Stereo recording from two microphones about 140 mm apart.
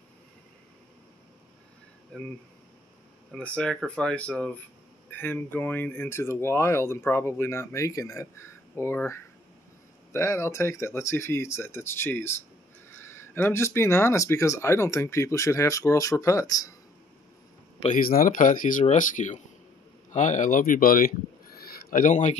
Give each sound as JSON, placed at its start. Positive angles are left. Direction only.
{"t": 2.1, "sound": "speech", "side_deg": 5}
{"t": 17.9, "sound": "speech", "side_deg": 85}
{"t": 21.9, "sound": "speech", "side_deg": 65}